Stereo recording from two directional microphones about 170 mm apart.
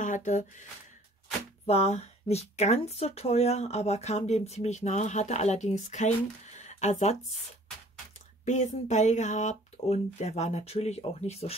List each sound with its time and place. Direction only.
0.0 s speech: 45° left (ahead or behind)
1.7 s speech: 40° left (ahead or behind)
8.5 s speech: 45° left (ahead or behind)